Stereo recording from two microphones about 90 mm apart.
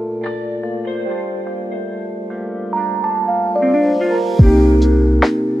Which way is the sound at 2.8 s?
Centre (ahead or behind).